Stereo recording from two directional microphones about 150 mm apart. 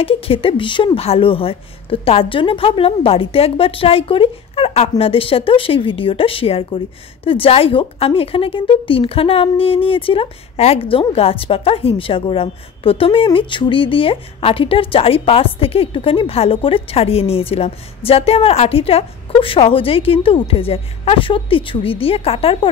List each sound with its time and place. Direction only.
0.0 s a woman's voice: 40° left (ahead or behind)